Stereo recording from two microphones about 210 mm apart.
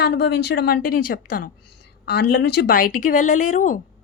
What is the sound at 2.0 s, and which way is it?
Speech, 55° left (ahead or behind).